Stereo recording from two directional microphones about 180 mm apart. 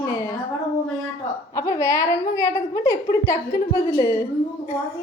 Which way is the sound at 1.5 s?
20° left (ahead or behind).